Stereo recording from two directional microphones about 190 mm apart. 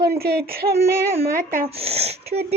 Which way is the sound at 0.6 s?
25° right (ahead or behind).